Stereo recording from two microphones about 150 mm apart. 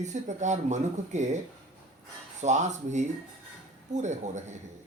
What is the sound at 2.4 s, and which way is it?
Speech, 50° right (ahead or behind).